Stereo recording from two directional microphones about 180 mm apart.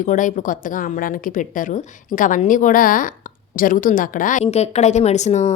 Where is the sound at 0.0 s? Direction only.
45° left (ahead or behind).